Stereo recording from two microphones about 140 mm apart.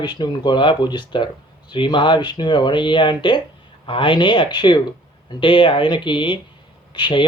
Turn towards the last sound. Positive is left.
turn(degrees=35)  # may be behind; listen again after turning